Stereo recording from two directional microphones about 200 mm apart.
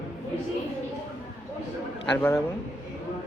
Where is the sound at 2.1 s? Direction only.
10° left (ahead or behind).